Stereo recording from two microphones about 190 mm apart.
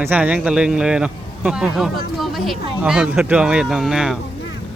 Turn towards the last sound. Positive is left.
turn(degrees=0)  # may be behind; listen again after turning